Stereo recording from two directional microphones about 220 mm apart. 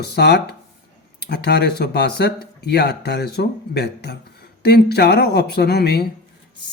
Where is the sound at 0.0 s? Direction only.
45° left (ahead or behind).